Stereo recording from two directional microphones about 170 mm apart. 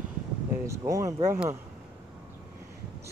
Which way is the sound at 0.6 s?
20° right (ahead or behind).